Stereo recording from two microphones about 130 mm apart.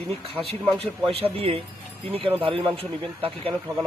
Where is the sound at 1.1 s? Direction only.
50° right (ahead or behind).